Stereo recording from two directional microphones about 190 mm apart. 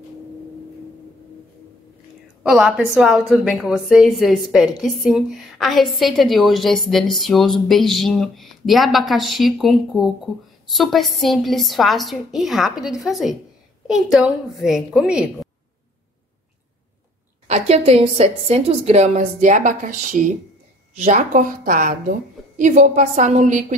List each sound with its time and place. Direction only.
2.4 s a woman's voice: centre (ahead or behind)
17.5 s a woman's voice: 35° right (ahead or behind)
21.0 s a woman's voice: 40° right (ahead or behind)